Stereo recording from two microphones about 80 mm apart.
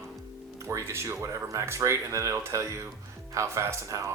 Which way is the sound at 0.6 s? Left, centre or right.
Right.